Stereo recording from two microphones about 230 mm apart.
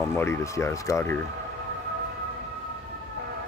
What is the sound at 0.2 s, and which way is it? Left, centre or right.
Speech, centre.